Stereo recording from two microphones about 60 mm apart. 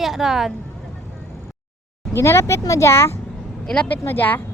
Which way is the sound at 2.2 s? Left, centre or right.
Left.